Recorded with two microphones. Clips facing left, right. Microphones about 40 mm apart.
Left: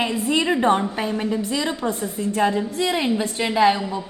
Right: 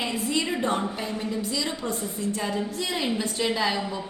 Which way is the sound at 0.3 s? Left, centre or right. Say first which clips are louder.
Left 8 dB; left.